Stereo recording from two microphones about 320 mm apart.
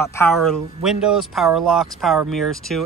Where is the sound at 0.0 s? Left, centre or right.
Centre.